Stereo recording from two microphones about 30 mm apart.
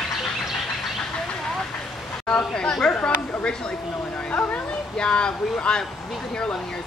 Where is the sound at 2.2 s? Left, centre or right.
Left.